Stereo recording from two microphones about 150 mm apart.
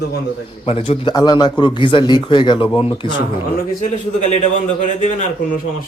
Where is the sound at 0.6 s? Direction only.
40° left (ahead or behind).